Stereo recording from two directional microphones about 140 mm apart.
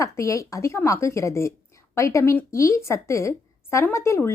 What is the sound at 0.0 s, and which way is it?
A woman's voice, 20° left (ahead or behind).